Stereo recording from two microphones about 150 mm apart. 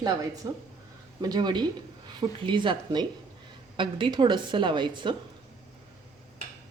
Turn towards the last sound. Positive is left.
turn(degrees=-30)  # may be behind; listen again after turning